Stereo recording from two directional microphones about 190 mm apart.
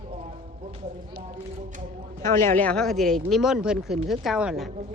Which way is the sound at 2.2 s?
15° left (ahead or behind).